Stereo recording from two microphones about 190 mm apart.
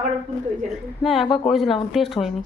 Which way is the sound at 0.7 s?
Centre (ahead or behind).